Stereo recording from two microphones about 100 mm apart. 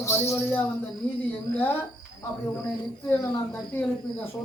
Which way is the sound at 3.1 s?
20° left (ahead or behind).